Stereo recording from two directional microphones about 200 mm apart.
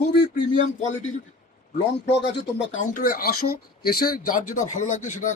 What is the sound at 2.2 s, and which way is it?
Speech, 60° left (ahead or behind).